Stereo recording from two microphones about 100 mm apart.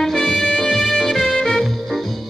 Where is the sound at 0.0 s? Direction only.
5° left (ahead or behind).